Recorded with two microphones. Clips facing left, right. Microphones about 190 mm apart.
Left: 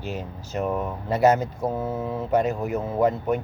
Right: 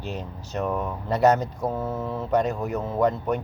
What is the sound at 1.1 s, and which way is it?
Speech, 5° left (ahead or behind).